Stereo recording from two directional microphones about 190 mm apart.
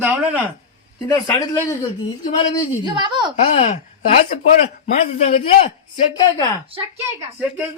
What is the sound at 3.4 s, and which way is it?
Speech, 30° left (ahead or behind).